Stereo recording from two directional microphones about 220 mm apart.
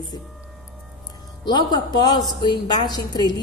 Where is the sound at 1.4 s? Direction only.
20° left (ahead or behind).